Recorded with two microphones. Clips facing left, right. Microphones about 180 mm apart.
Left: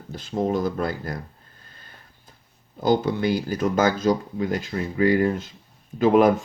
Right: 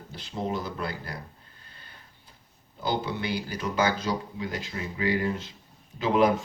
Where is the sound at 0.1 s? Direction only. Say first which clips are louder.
Left 7 dB; 45° left (ahead or behind).